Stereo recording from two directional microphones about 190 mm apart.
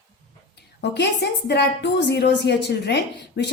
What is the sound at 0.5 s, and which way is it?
A woman's voice, 60° left (ahead or behind).